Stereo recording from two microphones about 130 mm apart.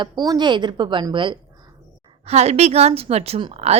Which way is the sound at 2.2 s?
55° right (ahead or behind).